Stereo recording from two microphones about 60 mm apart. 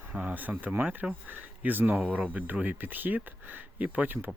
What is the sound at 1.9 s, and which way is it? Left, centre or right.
Speech, centre.